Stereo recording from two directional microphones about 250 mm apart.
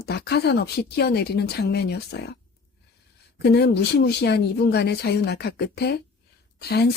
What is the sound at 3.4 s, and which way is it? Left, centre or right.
Speech, left.